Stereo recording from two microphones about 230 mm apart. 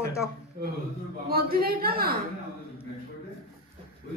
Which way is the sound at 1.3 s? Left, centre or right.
Right.